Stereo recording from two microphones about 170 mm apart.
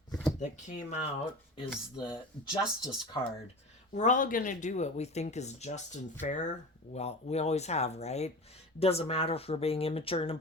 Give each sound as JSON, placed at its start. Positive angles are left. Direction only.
{"t": 0.1, "sound": "drawer open or close", "side_deg": 5}
{"t": 0.3, "sound": "speech", "side_deg": 40}
{"t": 2.0, "sound": "speech", "side_deg": 25}
{"t": 3.9, "sound": "speech", "side_deg": 45}